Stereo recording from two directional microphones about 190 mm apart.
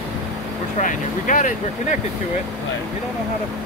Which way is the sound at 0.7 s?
45° left (ahead or behind).